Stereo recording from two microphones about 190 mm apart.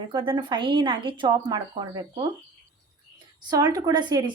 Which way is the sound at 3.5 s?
20° right (ahead or behind).